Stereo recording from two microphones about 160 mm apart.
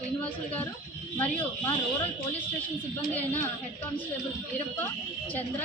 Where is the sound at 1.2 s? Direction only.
10° left (ahead or behind).